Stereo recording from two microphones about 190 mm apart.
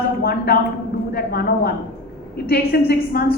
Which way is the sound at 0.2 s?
55° left (ahead or behind).